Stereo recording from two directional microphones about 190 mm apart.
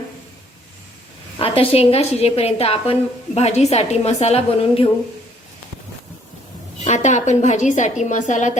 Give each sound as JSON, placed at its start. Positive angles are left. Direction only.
{"t": 1.4, "sound": "a woman's voice", "side_deg": 30}
{"t": 6.8, "sound": "a woman's voice", "side_deg": 40}